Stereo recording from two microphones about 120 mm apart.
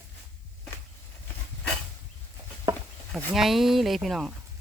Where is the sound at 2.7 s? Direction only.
30° right (ahead or behind).